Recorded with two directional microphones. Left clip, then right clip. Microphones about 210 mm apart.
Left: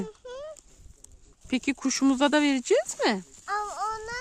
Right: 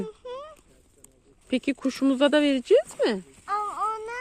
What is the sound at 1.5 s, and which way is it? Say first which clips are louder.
Speech: right 1 dB; 25° left (ahead or behind).